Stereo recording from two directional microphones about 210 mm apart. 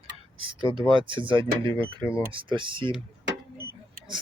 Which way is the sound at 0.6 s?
25° right (ahead or behind).